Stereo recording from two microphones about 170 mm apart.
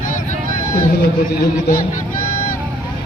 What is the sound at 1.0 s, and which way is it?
Speech, 60° left (ahead or behind).